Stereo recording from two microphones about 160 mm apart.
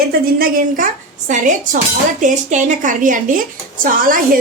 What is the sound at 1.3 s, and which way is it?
A woman's voice, 50° right (ahead or behind).